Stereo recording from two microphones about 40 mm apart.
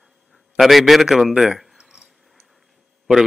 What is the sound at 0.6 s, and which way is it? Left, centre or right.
Speech, centre.